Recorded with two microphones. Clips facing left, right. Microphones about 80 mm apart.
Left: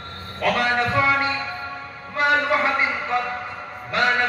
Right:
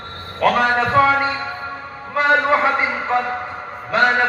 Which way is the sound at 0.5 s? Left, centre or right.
Right.